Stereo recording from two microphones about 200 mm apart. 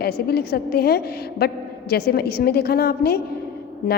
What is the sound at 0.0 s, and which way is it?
Speech, 55° left (ahead or behind).